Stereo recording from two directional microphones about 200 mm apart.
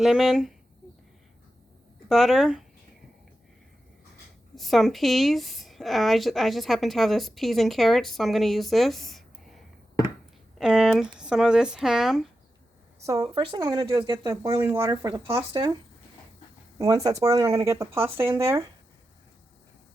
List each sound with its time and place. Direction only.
0.0 s a woman's voice: centre (ahead or behind)
2.0 s a woman's voice: centre (ahead or behind)
4.5 s a woman's voice: centre (ahead or behind)
13.1 s speech: 25° right (ahead or behind)
16.7 s speech: 20° right (ahead or behind)